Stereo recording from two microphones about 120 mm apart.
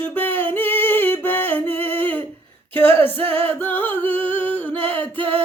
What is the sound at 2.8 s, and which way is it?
Female singing, 15° left (ahead or behind).